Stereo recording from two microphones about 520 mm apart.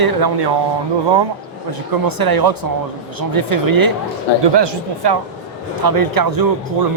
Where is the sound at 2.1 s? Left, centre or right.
Right.